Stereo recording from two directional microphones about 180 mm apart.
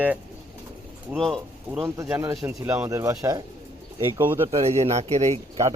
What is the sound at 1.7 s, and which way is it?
Speech, 10° right (ahead or behind).